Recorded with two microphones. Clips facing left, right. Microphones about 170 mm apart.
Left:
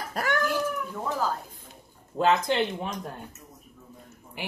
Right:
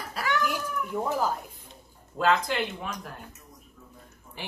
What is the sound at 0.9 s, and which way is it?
Cat, 15° right (ahead or behind).